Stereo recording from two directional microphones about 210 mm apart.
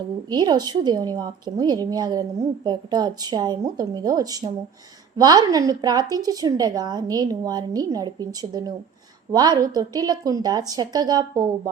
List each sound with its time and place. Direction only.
0.3 s a woman's voice: 20° right (ahead or behind)